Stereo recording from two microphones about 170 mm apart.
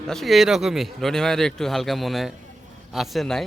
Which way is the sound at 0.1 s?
Centre (ahead or behind).